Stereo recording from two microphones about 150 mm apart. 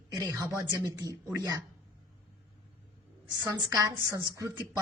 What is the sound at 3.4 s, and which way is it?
A woman's voice, 25° right (ahead or behind).